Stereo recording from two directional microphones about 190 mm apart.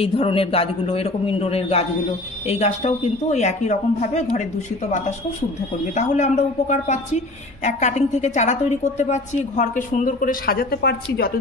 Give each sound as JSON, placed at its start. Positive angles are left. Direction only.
{"t": 0.0, "sound": "a woman's voice", "side_deg": 30}